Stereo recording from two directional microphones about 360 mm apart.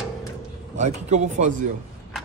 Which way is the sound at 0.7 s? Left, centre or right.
Centre.